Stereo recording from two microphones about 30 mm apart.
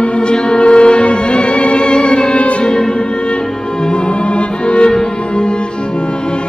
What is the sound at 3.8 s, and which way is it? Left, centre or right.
Music, left.